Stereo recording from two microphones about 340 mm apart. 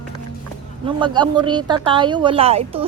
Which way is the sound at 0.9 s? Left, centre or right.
Centre.